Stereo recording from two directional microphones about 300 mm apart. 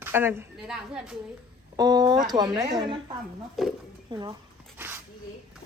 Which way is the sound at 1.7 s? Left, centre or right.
Centre.